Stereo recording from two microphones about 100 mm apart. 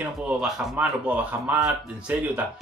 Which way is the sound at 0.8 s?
15° right (ahead or behind).